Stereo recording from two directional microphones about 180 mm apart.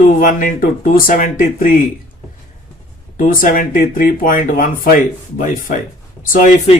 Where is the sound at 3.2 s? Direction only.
50° left (ahead or behind).